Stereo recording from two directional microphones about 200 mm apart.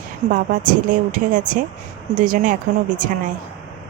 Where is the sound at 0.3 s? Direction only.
40° right (ahead or behind).